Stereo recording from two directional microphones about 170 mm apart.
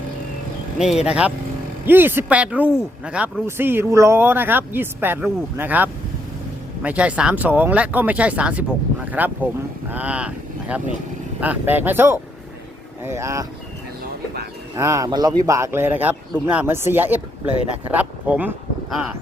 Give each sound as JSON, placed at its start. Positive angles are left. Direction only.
{"t": 0.8, "sound": "speech", "side_deg": -5}
{"t": 14.8, "sound": "speech", "side_deg": -20}
{"t": 17.9, "sound": "a sound", "side_deg": -10}